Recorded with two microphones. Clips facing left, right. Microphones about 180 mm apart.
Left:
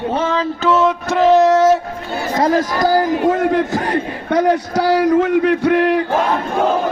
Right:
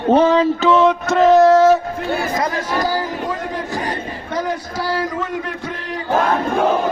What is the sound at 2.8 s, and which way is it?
Speech, 45° left (ahead or behind).